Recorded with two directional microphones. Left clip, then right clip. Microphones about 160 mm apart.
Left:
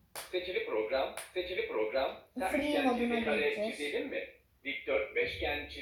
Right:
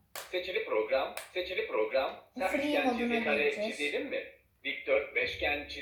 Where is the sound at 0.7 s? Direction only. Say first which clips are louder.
Right 3 dB; 15° right (ahead or behind).